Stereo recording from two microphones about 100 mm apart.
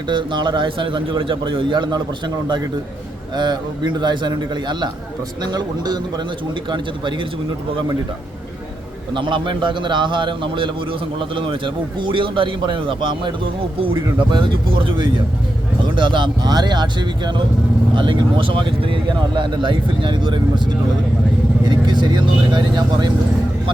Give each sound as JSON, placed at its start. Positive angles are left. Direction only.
{"t": 0.1, "sound": "a man's voice", "side_deg": -55}
{"t": 9.1, "sound": "a man's voice", "side_deg": -55}